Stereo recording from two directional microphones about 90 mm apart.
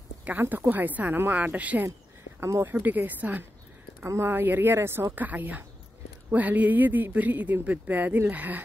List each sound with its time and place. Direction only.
0.2 s speech: 20° right (ahead or behind)